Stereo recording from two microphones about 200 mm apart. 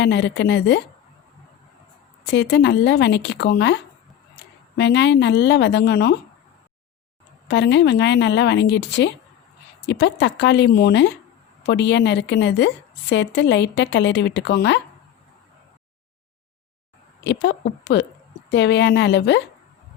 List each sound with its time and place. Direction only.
0.0 s a woman's voice: 60° left (ahead or behind)
2.2 s a woman's voice: 60° left (ahead or behind)
4.8 s a woman's voice: 60° left (ahead or behind)
7.4 s a woman's voice: 60° left (ahead or behind)
17.2 s a woman's voice: 60° left (ahead or behind)